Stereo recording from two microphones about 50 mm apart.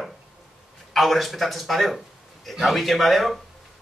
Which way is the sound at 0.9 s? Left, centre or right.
Centre.